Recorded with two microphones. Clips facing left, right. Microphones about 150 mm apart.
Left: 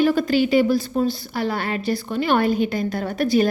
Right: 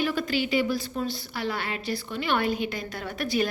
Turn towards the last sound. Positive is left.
turn(degrees=40)  # may be behind; listen again after turning